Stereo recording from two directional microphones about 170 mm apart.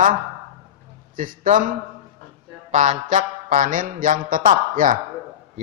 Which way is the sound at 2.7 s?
50° right (ahead or behind).